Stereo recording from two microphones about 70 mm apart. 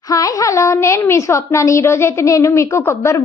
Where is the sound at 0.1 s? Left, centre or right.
Left.